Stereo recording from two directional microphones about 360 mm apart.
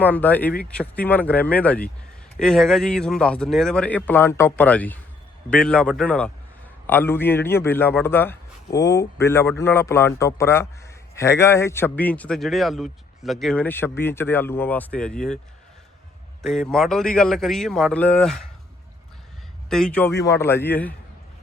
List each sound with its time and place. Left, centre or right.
0.0 s a man's voice: centre
16.5 s a man's voice: centre
19.7 s a man's voice: centre